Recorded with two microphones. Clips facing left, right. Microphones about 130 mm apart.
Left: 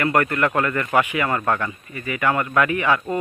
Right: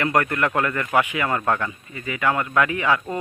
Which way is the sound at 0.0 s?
15° right (ahead or behind).